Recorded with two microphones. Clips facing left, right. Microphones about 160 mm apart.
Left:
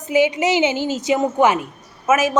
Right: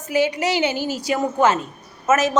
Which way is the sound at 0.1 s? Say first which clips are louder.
Left 3 dB; 20° left (ahead or behind).